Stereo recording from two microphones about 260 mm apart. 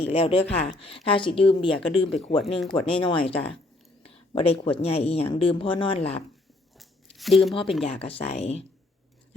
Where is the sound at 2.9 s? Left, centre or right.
Centre.